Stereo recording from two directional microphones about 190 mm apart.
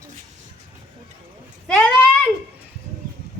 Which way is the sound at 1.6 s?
5° left (ahead or behind).